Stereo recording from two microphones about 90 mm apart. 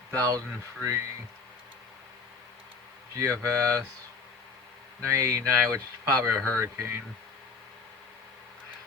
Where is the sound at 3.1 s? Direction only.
35° right (ahead or behind).